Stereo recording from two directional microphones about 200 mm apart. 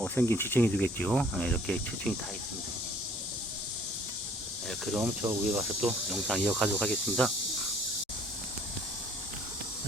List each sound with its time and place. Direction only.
0.0 s speech: 10° left (ahead or behind)
4.7 s snake: centre (ahead or behind)
5.0 s speech: 15° right (ahead or behind)
5.8 s speech: centre (ahead or behind)